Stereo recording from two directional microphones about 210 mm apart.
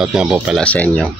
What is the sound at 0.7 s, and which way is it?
Speech, 5° left (ahead or behind).